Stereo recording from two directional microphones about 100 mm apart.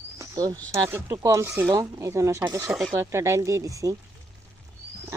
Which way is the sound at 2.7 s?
Centre (ahead or behind).